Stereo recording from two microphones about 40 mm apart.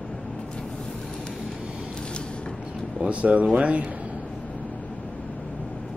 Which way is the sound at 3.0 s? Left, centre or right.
Right.